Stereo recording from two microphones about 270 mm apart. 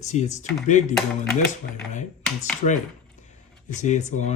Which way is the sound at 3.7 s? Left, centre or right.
Left.